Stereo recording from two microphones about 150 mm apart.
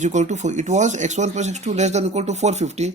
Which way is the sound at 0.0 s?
50° right (ahead or behind).